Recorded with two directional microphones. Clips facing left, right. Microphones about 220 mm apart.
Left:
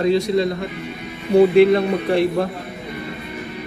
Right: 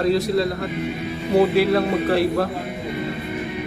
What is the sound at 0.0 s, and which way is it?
Speech, centre (ahead or behind).